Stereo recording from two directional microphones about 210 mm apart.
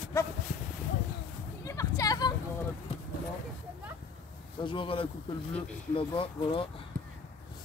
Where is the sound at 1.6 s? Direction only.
15° left (ahead or behind).